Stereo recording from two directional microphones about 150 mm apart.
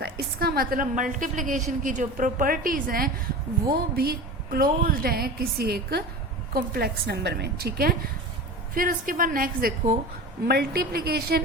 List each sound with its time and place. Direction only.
0.0 s a woman's voice: 90° right; by 3.1 s 70° right (ahead or behind)
3.9 s a woman's voice: 90° right
8.7 s a woman's voice: 70° right (ahead or behind)
10.5 s a woman's voice: 90° right